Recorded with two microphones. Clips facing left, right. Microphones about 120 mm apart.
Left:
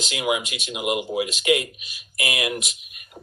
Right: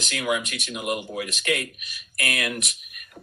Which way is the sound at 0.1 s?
20° left (ahead or behind).